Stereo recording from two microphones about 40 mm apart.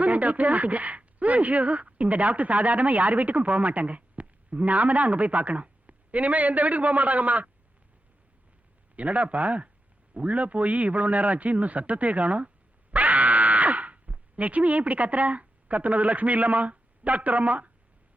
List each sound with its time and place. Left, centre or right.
0.0 s speech: right
9.0 s a man's voice: right
12.9 s a sound: right